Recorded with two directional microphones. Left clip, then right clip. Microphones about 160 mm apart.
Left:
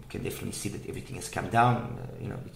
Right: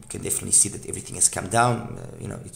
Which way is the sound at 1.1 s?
45° right (ahead or behind).